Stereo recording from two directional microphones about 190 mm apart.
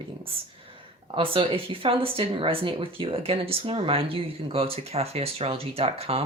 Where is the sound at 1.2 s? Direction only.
30° right (ahead or behind).